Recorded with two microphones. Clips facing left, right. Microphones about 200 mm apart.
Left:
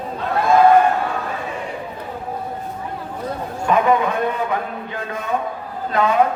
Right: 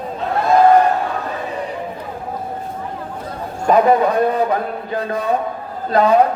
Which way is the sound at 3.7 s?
35° right (ahead or behind).